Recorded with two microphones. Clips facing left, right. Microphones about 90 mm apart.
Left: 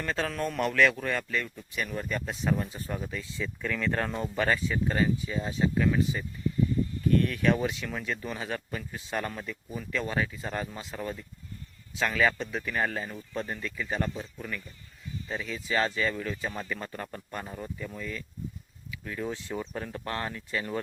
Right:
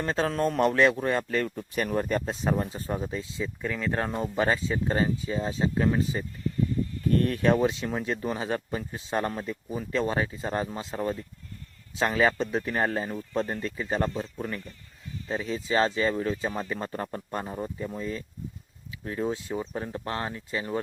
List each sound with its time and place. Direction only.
0.0 s speech: 30° right (ahead or behind)
1.4 s speech: 45° right (ahead or behind); by 19.3 s 30° right (ahead or behind)
19.3 s speech: 15° right (ahead or behind)